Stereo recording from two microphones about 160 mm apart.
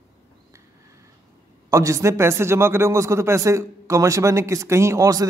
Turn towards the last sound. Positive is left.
turn(degrees=-20)  # may be behind; listen again after turning